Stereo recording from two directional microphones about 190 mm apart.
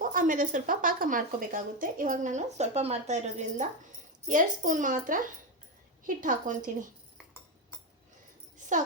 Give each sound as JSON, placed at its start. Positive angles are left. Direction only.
{"t": 0.0, "sound": "speech", "side_deg": -45}